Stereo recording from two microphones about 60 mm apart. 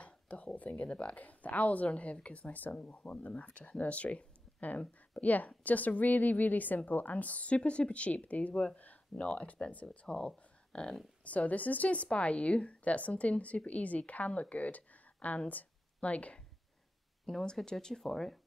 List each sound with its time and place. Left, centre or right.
0.0 s a woman's voice: left
11.2 s a woman's voice: left
17.3 s speech: centre